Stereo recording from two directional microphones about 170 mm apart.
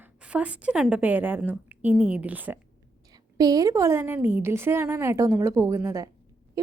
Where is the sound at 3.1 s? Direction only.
20° right (ahead or behind).